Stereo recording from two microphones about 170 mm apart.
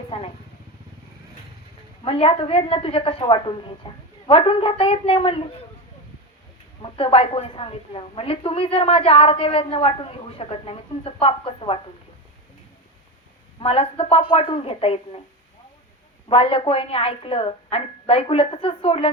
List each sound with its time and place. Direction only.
0.1 s a woman's voice: 35° left (ahead or behind)
2.0 s a woman's voice: 35° left (ahead or behind)
6.8 s a woman's voice: 30° left (ahead or behind)
13.6 s a woman's voice: 35° left (ahead or behind)
16.3 s a woman's voice: 30° left (ahead or behind)